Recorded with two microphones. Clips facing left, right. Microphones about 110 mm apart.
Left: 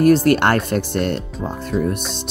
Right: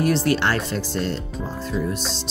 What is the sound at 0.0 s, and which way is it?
Speech, 50° left (ahead or behind).